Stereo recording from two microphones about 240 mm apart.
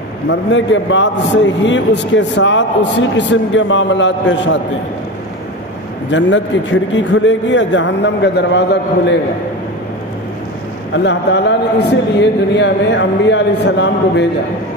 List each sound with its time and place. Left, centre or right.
0.3 s a man's voice: left
6.0 s a man's voice: left
10.9 s a man's voice: left